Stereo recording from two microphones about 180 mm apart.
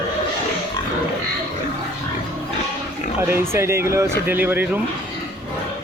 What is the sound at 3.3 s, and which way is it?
Speech, 15° right (ahead or behind).